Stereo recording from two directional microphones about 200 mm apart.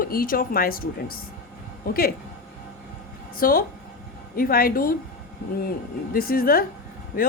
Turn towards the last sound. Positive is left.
turn(degrees=45)  # may be behind; listen again after turning